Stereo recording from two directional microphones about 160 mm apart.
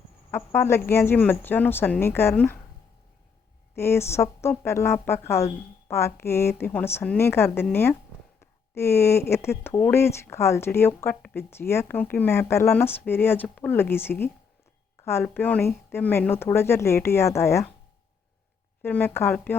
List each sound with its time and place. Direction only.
0.3 s speech: 15° left (ahead or behind)
3.8 s speech: 15° left (ahead or behind)
18.8 s speech: 10° left (ahead or behind)